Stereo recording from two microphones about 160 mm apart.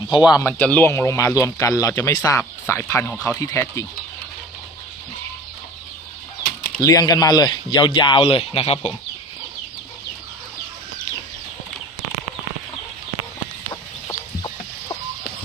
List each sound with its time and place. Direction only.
0.1 s speech: 25° left (ahead or behind)
0.4 s speech: 10° left (ahead or behind)
6.8 s speech: 25° left (ahead or behind)
14.1 s chicken: 25° left (ahead or behind)